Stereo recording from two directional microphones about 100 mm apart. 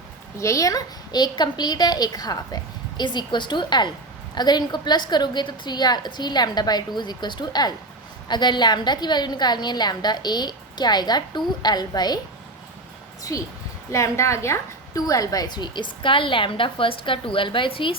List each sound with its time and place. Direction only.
0.3 s a woman's voice: 30° left (ahead or behind)
13.3 s a woman's voice: 35° left (ahead or behind); by 17.9 s 60° left (ahead or behind)